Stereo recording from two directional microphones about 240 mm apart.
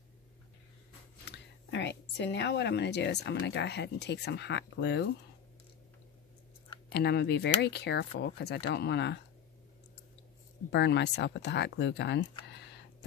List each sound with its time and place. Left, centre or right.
1.2 s a sound: left
3.3 s speech: left
6.9 s speech: left
10.7 s speech: left